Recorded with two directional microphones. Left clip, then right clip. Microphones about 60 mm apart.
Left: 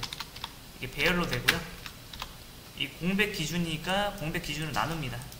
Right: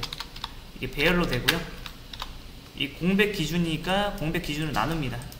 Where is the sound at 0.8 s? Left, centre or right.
Centre.